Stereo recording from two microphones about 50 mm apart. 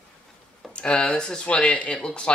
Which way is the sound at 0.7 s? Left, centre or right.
Left.